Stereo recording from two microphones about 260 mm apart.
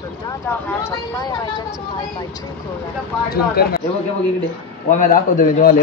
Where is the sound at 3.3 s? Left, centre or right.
Left.